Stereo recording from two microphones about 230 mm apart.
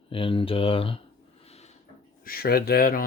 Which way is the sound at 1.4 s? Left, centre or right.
Left.